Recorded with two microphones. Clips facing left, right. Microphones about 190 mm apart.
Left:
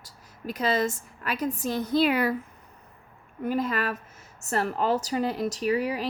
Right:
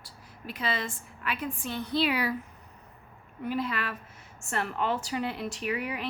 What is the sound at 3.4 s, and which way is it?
A woman's voice, 45° left (ahead or behind).